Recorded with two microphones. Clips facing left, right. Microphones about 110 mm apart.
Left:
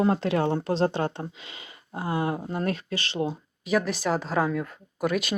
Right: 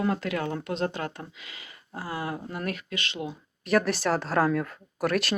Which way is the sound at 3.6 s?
Centre (ahead or behind).